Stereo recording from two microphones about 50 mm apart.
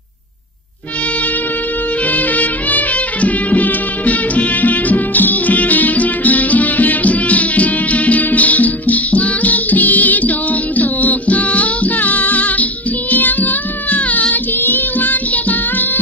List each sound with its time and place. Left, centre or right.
2.0 s music: left
13.1 s child singing: left